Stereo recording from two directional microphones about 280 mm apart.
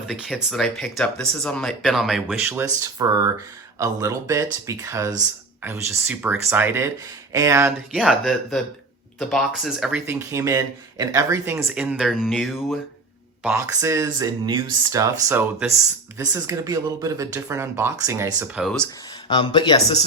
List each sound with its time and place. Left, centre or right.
0.1 s speech: centre
19.3 s speech: centre